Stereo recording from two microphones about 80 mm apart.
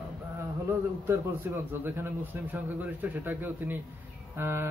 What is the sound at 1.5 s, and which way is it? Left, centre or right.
A man's voice, right.